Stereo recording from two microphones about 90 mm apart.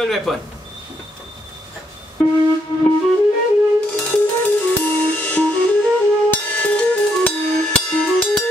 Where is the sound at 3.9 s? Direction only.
20° left (ahead or behind).